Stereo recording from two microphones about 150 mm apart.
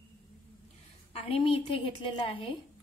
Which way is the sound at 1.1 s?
35° left (ahead or behind).